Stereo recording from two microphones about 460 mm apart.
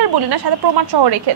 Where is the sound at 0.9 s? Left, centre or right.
Right.